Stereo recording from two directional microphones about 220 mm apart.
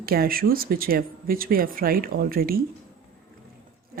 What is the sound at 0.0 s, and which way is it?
Speech, 40° right (ahead or behind).